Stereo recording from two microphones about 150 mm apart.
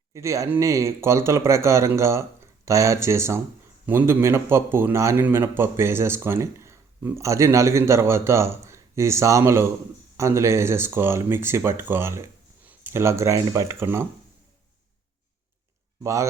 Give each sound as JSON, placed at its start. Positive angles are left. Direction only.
{"t": 0.1, "sound": "a man's voice", "side_deg": -20}